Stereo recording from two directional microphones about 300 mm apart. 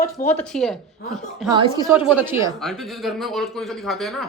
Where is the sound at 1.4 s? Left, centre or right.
Centre.